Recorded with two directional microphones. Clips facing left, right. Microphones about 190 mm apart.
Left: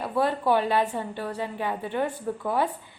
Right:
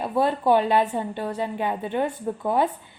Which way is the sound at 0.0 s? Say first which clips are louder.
Right 3 dB; 20° right (ahead or behind).